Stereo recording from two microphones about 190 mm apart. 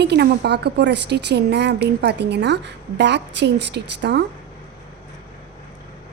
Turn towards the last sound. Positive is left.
turn(degrees=-60)  # may be behind; listen again after turning